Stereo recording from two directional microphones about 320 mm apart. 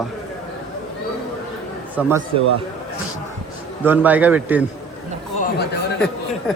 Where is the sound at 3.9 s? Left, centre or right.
Centre.